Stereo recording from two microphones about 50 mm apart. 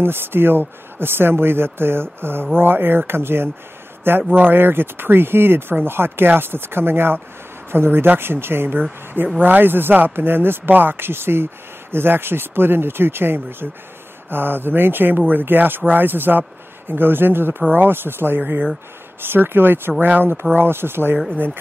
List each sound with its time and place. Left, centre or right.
0.0 s speech: right